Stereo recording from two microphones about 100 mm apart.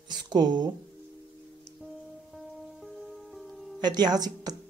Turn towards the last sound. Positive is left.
turn(degrees=-40)  # may be behind; listen again after turning